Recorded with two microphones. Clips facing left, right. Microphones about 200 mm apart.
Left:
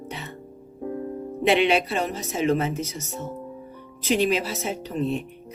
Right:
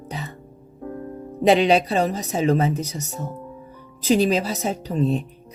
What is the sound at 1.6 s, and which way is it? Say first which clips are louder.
Speech: right 3 dB; 35° right (ahead or behind).